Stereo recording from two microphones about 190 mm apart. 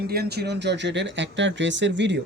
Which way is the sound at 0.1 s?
55° right (ahead or behind).